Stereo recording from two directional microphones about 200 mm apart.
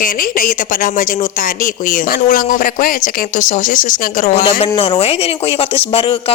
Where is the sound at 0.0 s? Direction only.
45° left (ahead or behind).